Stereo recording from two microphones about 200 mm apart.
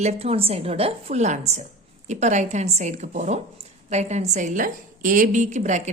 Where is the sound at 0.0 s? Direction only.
30° right (ahead or behind).